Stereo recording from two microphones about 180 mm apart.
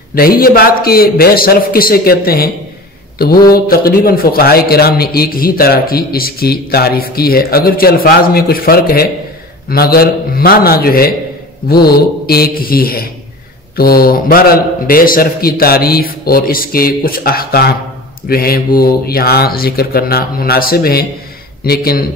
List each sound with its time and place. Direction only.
0.1 s a man's voice: 55° left (ahead or behind)